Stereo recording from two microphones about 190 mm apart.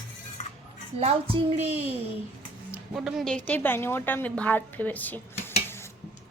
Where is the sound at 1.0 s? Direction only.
30° right (ahead or behind).